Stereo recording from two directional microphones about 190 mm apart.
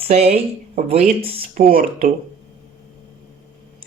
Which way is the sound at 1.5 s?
50° right (ahead or behind).